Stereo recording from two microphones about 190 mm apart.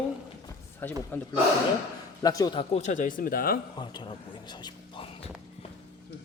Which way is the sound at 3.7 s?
25° left (ahead or behind).